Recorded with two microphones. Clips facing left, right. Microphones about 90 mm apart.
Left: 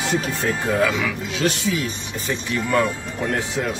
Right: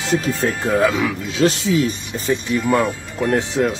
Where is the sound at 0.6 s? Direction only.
30° right (ahead or behind).